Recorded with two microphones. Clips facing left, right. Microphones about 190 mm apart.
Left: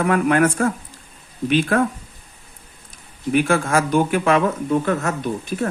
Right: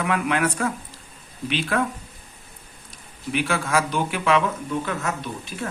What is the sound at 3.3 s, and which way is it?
Speech, 50° left (ahead or behind).